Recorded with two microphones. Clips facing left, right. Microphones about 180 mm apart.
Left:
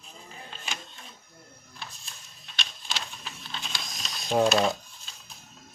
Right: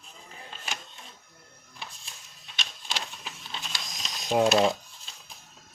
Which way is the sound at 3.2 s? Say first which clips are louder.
Even; 10° right (ahead or behind).